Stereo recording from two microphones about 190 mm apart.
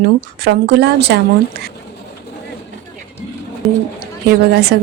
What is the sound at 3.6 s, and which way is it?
Speech, centre (ahead or behind).